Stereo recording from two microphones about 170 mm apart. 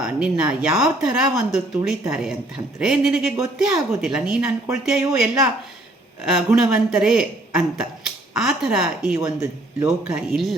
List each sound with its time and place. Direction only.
0.0 s speech: 5° right (ahead or behind)
9.1 s speech: 20° right (ahead or behind)
10.1 s speech: 5° right (ahead or behind)